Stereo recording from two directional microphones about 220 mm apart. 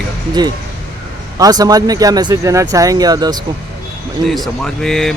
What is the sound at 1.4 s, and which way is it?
Speech, 15° right (ahead or behind).